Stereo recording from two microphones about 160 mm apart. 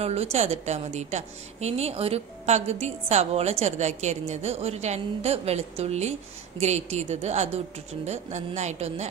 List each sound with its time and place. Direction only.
0.0 s a woman's voice: 40° right (ahead or behind)